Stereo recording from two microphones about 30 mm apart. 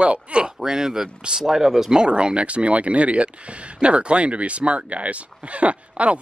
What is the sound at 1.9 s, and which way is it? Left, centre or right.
Speech, right.